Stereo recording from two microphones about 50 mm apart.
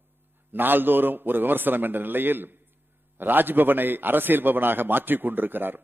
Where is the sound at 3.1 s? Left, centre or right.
Right.